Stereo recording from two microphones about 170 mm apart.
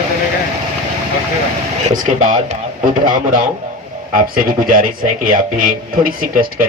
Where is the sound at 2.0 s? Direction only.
50° right (ahead or behind).